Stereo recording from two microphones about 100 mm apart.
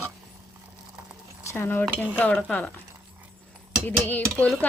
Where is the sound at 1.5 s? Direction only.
20° left (ahead or behind).